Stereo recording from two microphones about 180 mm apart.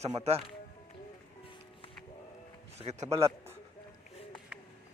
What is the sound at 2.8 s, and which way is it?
Speech, 35° right (ahead or behind).